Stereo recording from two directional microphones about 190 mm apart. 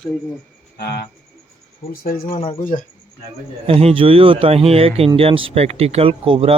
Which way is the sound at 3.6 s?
30° right (ahead or behind).